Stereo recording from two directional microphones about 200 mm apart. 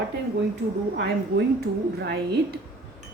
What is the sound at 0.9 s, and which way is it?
Speech, 60° right (ahead or behind).